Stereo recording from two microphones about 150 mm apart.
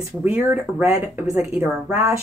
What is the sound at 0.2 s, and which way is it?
Speech, 10° right (ahead or behind).